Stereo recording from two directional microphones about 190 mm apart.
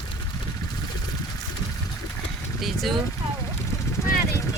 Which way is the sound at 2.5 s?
Centre (ahead or behind).